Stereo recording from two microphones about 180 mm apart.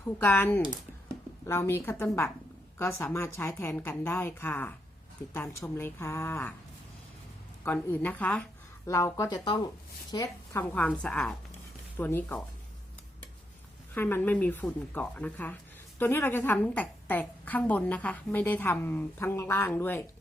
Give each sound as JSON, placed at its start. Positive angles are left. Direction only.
{"t": 0.2, "sound": "a woman's voice", "side_deg": 10}
{"t": 7.6, "sound": "a woman's voice", "side_deg": 10}
{"t": 10.6, "sound": "a woman's voice", "side_deg": 10}
{"t": 13.9, "sound": "a woman's voice", "side_deg": 10}